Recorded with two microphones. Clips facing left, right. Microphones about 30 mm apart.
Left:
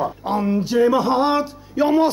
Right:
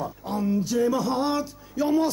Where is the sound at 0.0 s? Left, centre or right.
Left.